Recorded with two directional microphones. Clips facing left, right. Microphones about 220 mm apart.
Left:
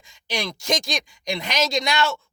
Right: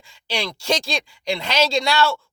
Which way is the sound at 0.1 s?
20° left (ahead or behind).